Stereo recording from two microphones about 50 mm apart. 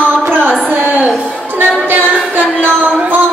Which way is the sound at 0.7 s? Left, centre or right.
Right.